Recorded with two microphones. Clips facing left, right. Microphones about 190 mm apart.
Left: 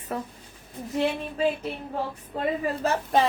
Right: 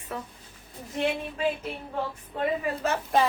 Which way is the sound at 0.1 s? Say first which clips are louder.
Left 4 dB; 40° left (ahead or behind).